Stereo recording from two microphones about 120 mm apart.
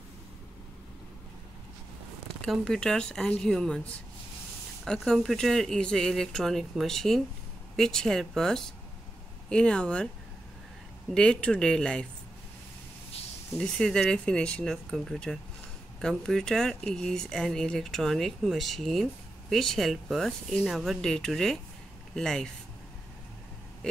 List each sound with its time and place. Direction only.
2.4 s speech: 5° left (ahead or behind)
4.8 s speech: 5° left (ahead or behind)
11.1 s speech: 5° left (ahead or behind)
13.6 s speech: 5° left (ahead or behind)